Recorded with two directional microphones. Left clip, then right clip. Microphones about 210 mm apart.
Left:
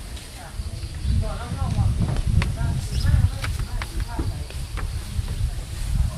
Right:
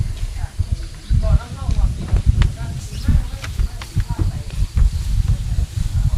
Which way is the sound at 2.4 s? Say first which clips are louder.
Right 2 dB; 15° left (ahead or behind).